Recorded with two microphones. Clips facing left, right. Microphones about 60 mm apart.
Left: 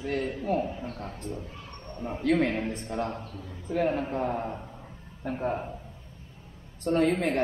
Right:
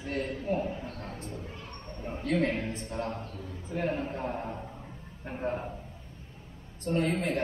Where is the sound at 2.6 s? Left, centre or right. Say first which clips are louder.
Left 3 dB; left.